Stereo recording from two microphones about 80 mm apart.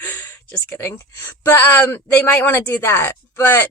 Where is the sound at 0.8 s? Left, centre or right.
Left.